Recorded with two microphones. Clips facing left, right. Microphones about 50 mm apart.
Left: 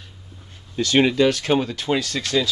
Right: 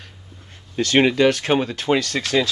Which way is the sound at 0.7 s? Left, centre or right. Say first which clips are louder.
Right 1 dB; right.